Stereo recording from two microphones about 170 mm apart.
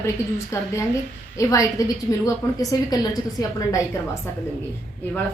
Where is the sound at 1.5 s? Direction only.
20° left (ahead or behind).